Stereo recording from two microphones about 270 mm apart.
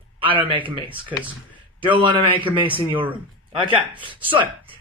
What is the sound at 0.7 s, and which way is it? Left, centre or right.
A man's voice, centre.